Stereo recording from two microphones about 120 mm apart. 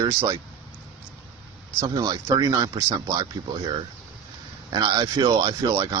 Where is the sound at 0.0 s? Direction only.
30° right (ahead or behind).